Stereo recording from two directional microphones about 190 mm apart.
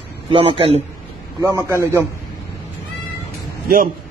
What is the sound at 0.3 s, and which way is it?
Speech, 30° right (ahead or behind).